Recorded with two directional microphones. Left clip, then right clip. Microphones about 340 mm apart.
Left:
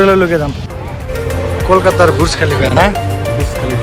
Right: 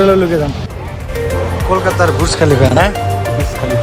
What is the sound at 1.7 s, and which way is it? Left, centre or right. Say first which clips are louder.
Speech: left 4 dB; centre.